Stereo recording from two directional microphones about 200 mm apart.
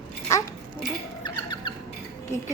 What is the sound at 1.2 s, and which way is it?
Rodents, 20° left (ahead or behind).